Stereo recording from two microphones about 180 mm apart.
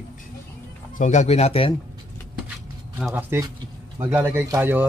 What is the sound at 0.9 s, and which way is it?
Speech, 40° left (ahead or behind).